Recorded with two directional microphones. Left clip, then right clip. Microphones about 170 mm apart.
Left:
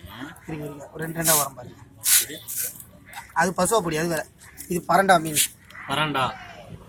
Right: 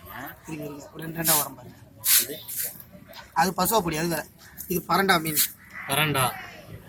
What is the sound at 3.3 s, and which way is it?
Speech, centre (ahead or behind).